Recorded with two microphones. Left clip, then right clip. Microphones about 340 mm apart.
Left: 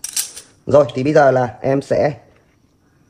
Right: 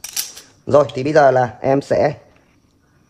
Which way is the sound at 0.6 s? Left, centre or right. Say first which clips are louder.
Left 1 dB; right.